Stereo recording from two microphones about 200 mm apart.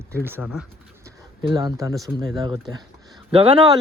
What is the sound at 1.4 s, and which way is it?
Speech, 20° right (ahead or behind).